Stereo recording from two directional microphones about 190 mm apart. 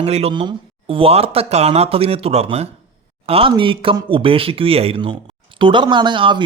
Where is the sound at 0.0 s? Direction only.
30° right (ahead or behind).